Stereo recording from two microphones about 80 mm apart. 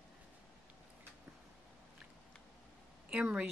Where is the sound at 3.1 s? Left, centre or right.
Centre.